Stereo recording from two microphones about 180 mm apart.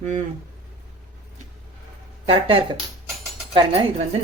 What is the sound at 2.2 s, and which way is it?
Speech, 30° right (ahead or behind).